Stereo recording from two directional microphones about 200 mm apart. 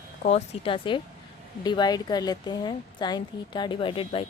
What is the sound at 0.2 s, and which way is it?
A woman's voice, 35° left (ahead or behind).